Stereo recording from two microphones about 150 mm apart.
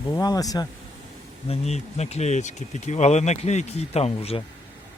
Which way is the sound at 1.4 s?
45° left (ahead or behind).